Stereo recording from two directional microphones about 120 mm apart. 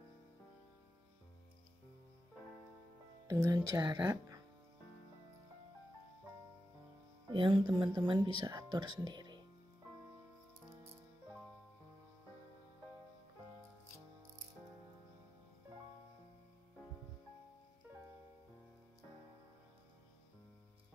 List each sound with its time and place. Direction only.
3.3 s speech: 30° right (ahead or behind)
7.2 s speech: 40° right (ahead or behind)